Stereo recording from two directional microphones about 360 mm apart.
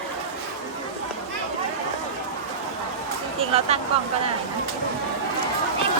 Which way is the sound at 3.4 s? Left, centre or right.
Centre.